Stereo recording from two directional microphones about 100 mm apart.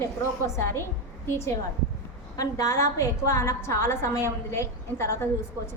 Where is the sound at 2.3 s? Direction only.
35° left (ahead or behind).